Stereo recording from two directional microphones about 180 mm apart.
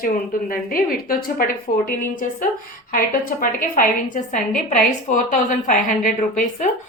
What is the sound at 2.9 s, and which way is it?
A woman's voice, 50° left (ahead or behind).